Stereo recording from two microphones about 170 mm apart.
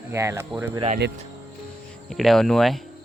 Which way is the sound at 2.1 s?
Centre (ahead or behind).